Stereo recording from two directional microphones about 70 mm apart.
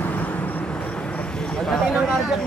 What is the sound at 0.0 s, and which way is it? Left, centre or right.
Vehicle, left.